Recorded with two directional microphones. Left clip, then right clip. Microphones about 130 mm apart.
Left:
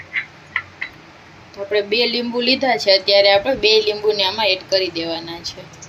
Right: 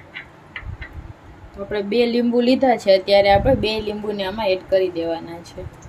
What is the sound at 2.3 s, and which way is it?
A woman's voice, 90° right.